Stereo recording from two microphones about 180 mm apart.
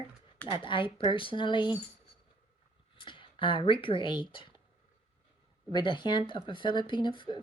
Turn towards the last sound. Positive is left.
turn(degrees=25)  # may be behind; listen again after turning